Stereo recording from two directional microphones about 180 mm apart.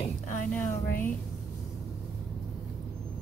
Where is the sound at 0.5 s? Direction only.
10° left (ahead or behind).